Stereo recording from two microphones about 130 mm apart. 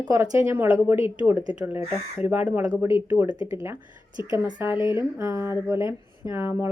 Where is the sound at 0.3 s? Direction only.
20° right (ahead or behind).